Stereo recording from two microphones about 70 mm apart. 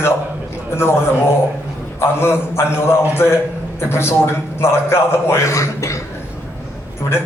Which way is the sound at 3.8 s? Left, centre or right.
Left.